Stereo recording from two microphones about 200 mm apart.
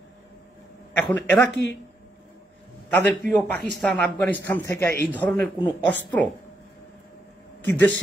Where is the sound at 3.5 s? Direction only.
5° left (ahead or behind).